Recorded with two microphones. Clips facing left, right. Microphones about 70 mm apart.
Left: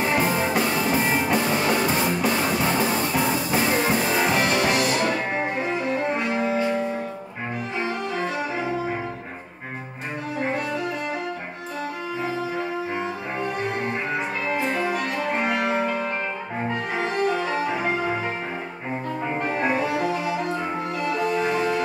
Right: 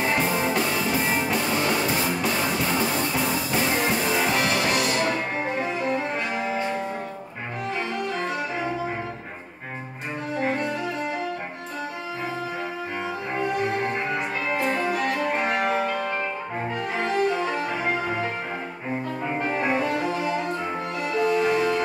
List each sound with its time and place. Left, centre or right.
0.1 s music: centre
3.9 s music: left
4.2 s music: centre
4.5 s music: centre
5.6 s music: centre
14.1 s music: centre
15.8 s music: centre
17.4 s music: centre
19.2 s music: centre